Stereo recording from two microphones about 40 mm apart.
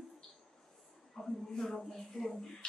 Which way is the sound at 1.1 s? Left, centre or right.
Centre.